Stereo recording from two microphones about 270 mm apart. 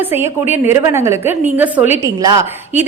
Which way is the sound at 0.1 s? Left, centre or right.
Centre.